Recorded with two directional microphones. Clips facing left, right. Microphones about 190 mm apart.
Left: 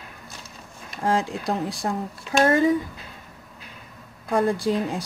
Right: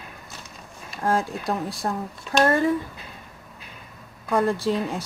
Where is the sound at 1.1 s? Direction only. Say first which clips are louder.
Left 1 dB; 15° left (ahead or behind).